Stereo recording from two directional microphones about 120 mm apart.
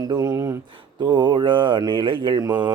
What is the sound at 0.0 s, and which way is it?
Speech, 30° right (ahead or behind).